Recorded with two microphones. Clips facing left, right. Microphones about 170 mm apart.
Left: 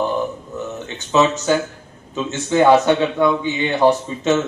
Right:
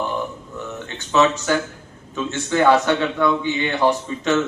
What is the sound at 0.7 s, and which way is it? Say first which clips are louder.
A man's voice: left 2 dB; 15° left (ahead or behind).